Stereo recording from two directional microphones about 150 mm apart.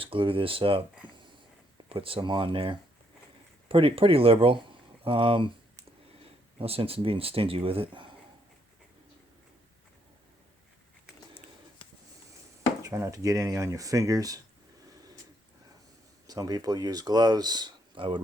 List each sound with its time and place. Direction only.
0.0 s speech: 35° right (ahead or behind)
1.9 s speech: 35° right (ahead or behind)
6.6 s speech: 40° right (ahead or behind)
12.8 s speech: 20° right (ahead or behind)
16.2 s speech: 25° right (ahead or behind)